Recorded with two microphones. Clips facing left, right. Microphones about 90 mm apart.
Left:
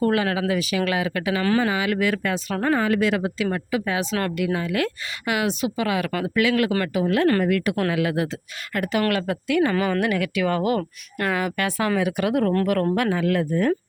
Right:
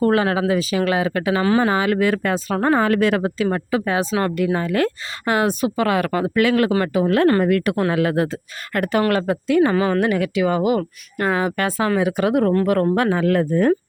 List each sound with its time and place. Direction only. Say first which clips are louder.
0.0 s speech: right 4 dB; 35° right (ahead or behind)
2.7 s speech: right 3 dB; 55° right (ahead or behind)
6.1 s speech: right 4 dB; 35° right (ahead or behind)
6.7 s speech: right 4 dB; 30° right (ahead or behind); by 9.0 s 50° right (ahead or behind)
9.0 s speech: right 4 dB; 30° right (ahead or behind)
9.7 s speech: right 4 dB; 15° right (ahead or behind)
10.0 s speech: right 4 dB; 25° right (ahead or behind)